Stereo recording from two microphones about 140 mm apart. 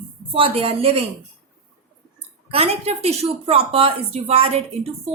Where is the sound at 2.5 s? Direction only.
50° right (ahead or behind).